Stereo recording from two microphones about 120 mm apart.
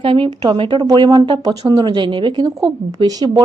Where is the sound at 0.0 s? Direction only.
45° right (ahead or behind).